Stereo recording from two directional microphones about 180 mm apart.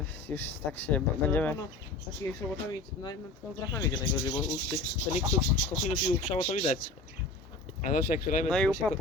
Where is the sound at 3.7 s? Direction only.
20° left (ahead or behind).